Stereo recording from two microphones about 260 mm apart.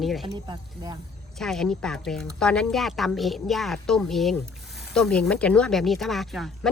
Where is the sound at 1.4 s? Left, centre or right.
Centre.